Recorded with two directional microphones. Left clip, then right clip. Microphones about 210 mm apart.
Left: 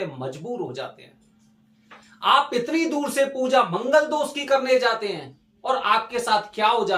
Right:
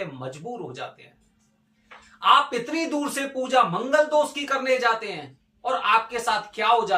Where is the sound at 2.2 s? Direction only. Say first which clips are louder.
Even; 15° left (ahead or behind).